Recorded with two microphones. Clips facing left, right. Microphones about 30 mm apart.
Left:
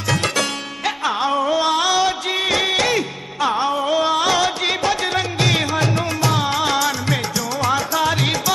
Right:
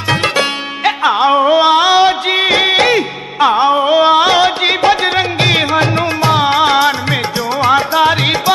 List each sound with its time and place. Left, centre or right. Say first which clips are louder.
0.1 s music: right 6 dB; right